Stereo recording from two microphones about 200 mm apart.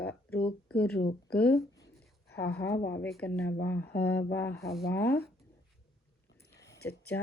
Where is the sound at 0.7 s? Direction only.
5° left (ahead or behind).